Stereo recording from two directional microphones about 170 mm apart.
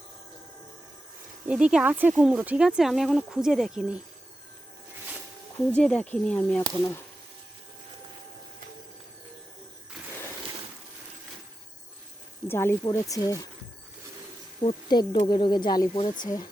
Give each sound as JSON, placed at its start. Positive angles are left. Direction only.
{"t": 1.5, "sound": "speech", "side_deg": -5}
{"t": 5.7, "sound": "speech", "side_deg": 5}
{"t": 12.5, "sound": "speech", "side_deg": 15}
{"t": 14.6, "sound": "speech", "side_deg": 30}